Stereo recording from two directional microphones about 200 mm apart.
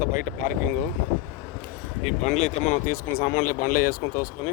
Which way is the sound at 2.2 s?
35° left (ahead or behind).